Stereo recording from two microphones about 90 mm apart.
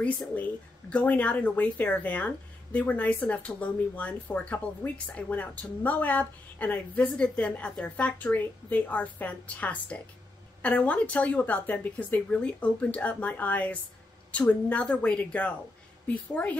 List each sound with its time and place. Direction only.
0.4 s speech: 15° left (ahead or behind)